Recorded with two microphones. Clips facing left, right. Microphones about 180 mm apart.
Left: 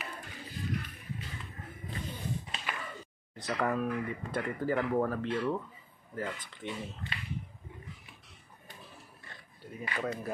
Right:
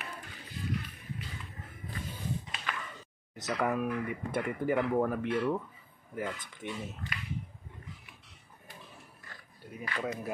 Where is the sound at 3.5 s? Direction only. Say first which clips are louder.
Even; 5° right (ahead or behind).